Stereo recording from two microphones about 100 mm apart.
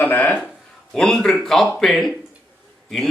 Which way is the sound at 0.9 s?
5° left (ahead or behind).